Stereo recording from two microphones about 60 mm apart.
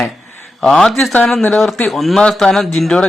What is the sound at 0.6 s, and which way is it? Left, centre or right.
A man's voice, centre.